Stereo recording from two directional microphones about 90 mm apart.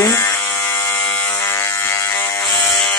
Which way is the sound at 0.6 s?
20° left (ahead or behind).